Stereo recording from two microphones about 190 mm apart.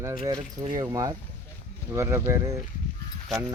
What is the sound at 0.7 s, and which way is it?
Speech, 20° right (ahead or behind).